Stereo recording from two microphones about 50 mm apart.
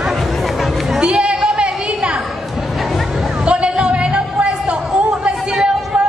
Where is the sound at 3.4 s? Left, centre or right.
Right.